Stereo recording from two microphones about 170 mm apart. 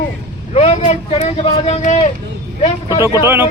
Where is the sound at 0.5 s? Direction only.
40° left (ahead or behind).